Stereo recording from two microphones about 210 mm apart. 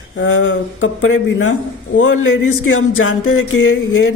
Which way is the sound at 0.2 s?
65° left (ahead or behind).